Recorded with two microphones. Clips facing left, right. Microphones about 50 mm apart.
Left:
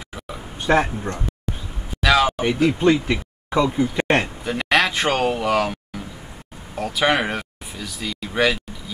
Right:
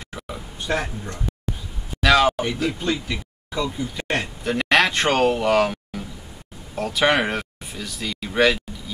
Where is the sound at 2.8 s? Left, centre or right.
Left.